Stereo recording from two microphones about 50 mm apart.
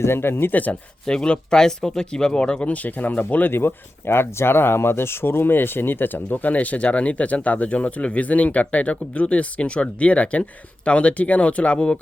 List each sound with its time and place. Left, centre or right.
0.0 s speech: left
0.5 s speech: left
1.0 s speech: centre; by 3.5 s left
3.5 s speech: left